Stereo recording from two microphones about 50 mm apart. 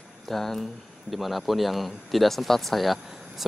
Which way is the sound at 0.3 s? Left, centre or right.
Centre.